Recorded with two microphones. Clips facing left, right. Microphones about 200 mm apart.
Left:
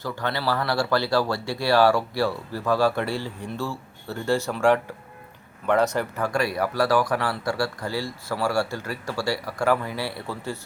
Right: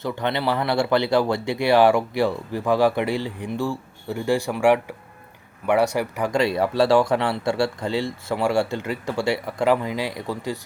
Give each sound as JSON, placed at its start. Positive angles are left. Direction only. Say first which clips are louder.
{"t": 0.0, "sound": "speech", "louder": "right 3 dB", "side_deg": -20}